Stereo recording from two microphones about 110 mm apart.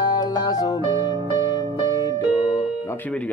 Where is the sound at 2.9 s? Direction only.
15° left (ahead or behind).